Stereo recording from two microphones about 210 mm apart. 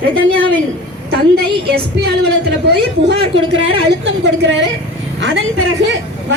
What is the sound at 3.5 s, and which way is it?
A woman's voice, 65° right (ahead or behind).